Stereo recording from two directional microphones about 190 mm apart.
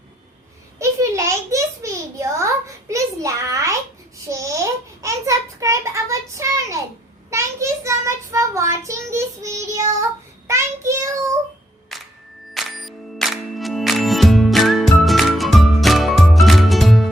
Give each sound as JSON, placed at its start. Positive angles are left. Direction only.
{"t": 0.8, "sound": "a sound", "side_deg": -15}
{"t": 7.3, "sound": "child singing", "side_deg": -15}
{"t": 11.9, "sound": "music", "side_deg": 0}